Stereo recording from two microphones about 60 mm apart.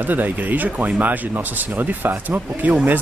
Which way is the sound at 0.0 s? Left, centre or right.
Right.